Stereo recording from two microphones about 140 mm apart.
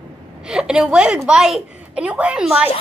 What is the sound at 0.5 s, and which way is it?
A woman's voice, 5° right (ahead or behind).